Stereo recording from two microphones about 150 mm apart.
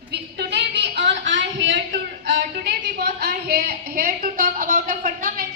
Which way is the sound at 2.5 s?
90° right.